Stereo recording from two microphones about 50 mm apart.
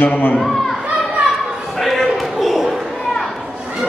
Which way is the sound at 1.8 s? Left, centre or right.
Centre.